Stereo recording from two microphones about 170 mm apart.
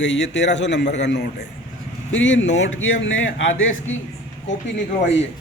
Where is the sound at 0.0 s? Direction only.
90° left.